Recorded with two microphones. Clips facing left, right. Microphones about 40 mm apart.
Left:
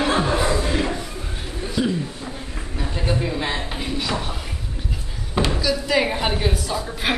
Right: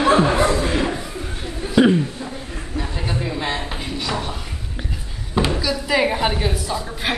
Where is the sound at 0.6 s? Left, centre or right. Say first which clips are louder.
Right 2 dB; centre.